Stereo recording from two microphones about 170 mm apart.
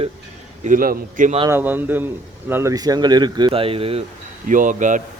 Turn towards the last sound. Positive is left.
turn(degrees=-50)  # may be behind; listen again after turning